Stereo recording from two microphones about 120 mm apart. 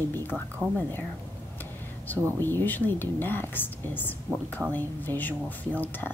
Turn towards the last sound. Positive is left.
turn(degrees=15)  # may be behind; listen again after turning